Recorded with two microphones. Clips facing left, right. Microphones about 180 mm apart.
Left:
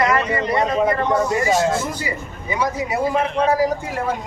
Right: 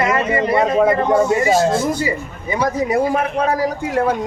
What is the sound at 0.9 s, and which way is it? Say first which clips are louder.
Speech: right 4 dB; 25° right (ahead or behind).